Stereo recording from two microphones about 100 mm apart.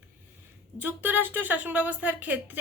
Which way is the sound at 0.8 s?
20° right (ahead or behind).